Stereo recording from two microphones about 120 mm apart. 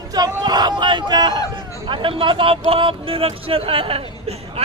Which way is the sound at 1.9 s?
45° right (ahead or behind).